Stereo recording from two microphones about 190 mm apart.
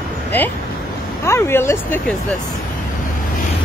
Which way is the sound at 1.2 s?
15° left (ahead or behind).